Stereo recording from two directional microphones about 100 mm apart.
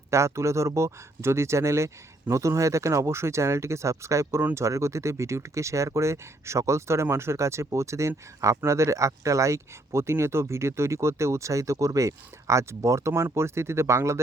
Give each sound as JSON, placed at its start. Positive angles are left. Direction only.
{"t": 0.1, "sound": "speech", "side_deg": -30}